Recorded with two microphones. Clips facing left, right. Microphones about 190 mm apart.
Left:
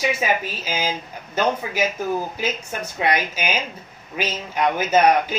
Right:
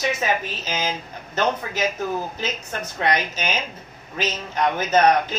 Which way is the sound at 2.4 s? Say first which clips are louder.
Left 2 dB; 10° left (ahead or behind).